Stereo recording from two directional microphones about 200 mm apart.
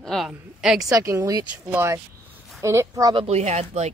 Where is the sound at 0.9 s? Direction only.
15° right (ahead or behind).